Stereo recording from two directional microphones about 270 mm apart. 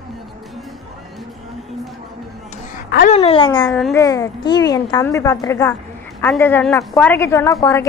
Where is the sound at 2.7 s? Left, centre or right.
Left.